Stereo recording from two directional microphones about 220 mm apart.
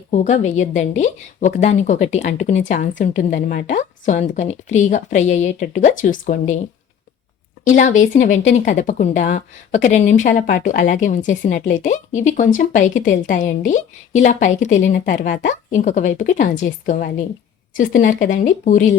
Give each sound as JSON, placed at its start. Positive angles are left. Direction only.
{"t": 0.1, "sound": "a woman's voice", "side_deg": 35}
{"t": 7.8, "sound": "a woman's voice", "side_deg": 35}